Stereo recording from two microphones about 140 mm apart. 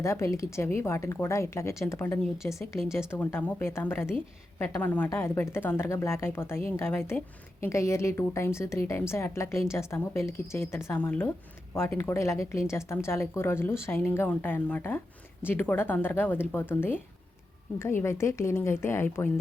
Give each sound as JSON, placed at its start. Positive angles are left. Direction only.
{"t": 0.0, "sound": "a woman's voice", "side_deg": 20}